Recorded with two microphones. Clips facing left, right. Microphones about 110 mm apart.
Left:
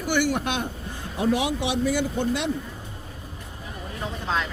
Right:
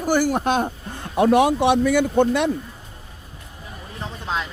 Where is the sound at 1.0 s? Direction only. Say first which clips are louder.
Right 8 dB; 65° right (ahead or behind).